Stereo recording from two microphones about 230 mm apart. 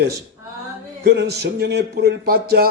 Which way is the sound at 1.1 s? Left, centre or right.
Right.